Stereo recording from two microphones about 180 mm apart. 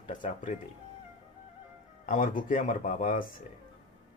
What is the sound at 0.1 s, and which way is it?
Speech, 45° left (ahead or behind).